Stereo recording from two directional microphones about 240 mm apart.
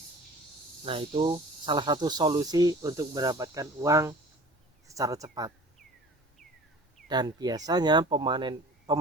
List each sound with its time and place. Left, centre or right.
0.9 s speech: right
7.1 s speech: centre